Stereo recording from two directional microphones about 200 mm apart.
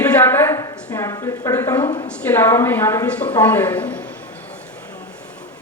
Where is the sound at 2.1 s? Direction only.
5° left (ahead or behind).